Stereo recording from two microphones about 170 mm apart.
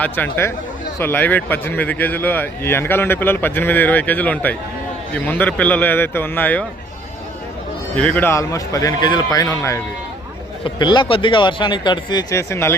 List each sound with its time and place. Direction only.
0.0 s speech: 10° left (ahead or behind)
7.9 s speech: 10° left (ahead or behind)